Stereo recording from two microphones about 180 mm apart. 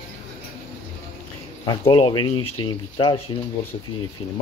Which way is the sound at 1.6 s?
25° left (ahead or behind).